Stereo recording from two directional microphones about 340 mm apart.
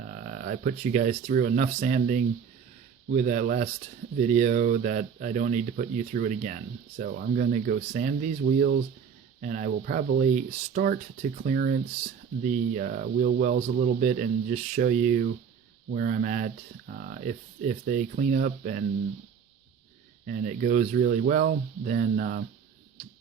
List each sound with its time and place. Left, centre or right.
0.1 s speech: right
20.2 s speech: right